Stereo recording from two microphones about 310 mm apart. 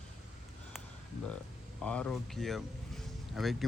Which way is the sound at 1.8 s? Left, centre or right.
Centre.